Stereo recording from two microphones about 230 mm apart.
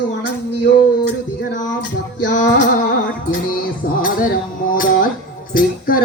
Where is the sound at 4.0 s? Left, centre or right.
Left.